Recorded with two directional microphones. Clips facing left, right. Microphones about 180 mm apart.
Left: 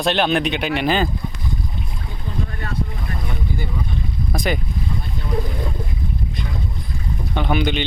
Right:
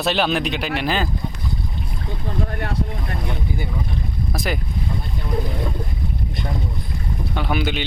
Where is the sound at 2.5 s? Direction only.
65° right (ahead or behind).